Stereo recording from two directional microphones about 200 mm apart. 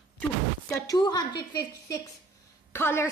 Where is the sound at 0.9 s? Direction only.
20° left (ahead or behind).